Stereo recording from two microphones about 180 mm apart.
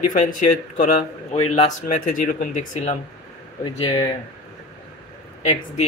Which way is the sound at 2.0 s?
50° left (ahead or behind).